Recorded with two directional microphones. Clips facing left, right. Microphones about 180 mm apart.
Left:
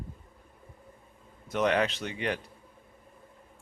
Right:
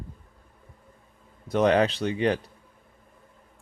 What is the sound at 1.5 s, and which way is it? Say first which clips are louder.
Speech: right 6 dB; 35° right (ahead or behind).